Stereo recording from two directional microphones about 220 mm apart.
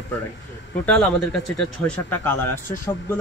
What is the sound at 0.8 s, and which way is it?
Speech, 5° left (ahead or behind).